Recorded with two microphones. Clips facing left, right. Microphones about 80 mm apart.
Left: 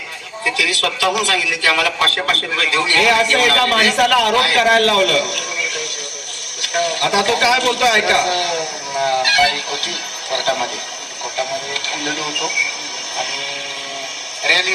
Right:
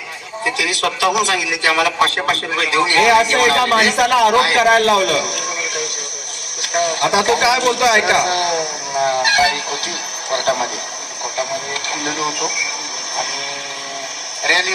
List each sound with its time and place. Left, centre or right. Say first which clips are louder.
0.4 s a man's voice: even; right
14.4 s speech: right 1 dB; right